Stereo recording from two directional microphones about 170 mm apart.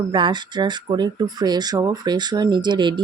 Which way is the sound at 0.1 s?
25° right (ahead or behind).